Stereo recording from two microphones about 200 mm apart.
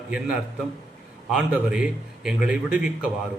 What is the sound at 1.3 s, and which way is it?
A man's voice, 5° right (ahead or behind).